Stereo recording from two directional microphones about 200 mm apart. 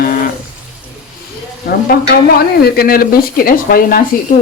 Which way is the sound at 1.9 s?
50° left (ahead or behind).